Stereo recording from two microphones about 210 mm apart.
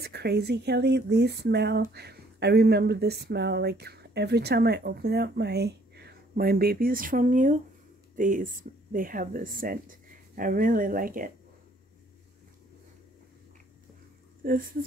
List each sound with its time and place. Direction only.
0.0 s speech: 50° right (ahead or behind)
14.4 s speech: 40° right (ahead or behind)